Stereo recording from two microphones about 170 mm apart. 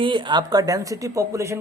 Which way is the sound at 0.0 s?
30° right (ahead or behind).